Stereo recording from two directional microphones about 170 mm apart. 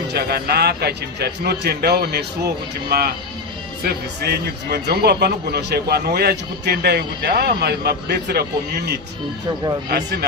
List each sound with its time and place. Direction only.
0.1 s a man's voice: 70° right (ahead or behind)
3.8 s a man's voice: 70° right (ahead or behind)